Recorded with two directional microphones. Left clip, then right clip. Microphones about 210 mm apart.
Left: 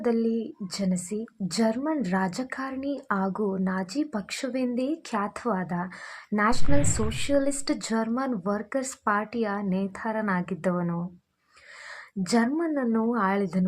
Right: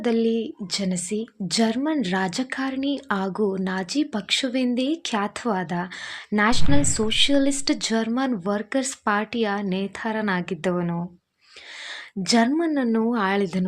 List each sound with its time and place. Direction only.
0.0 s speech: 35° right (ahead or behind)
12.2 s speech: 35° right (ahead or behind)